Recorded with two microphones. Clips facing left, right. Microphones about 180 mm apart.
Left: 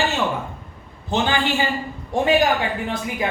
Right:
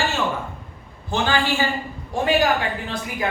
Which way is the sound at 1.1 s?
20° left (ahead or behind).